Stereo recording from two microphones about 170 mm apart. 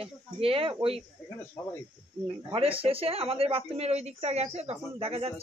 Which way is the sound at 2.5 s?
35° right (ahead or behind).